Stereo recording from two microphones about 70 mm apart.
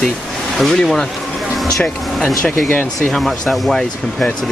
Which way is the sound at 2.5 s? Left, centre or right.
Left.